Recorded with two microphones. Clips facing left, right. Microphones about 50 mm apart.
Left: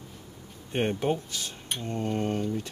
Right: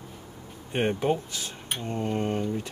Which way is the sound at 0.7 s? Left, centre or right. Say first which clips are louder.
Right 2 dB; centre.